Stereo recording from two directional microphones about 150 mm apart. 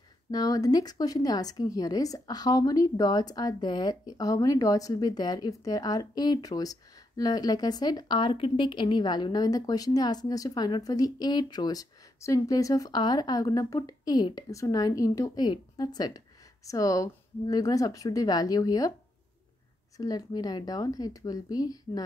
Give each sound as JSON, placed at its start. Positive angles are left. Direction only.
{"t": 0.3, "sound": "a woman's voice", "side_deg": 25}
{"t": 20.0, "sound": "a woman's voice", "side_deg": 25}